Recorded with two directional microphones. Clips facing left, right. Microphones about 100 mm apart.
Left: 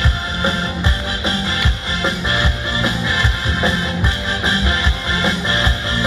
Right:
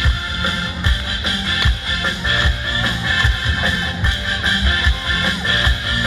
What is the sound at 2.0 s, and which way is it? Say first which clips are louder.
Music: left 2 dB; 25° left (ahead or behind).